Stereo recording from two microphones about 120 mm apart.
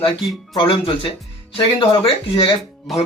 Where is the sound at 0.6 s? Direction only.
45° left (ahead or behind).